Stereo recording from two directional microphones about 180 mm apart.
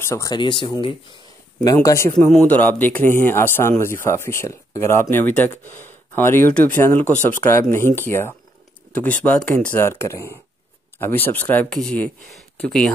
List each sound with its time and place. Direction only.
0.0 s speech: 15° left (ahead or behind)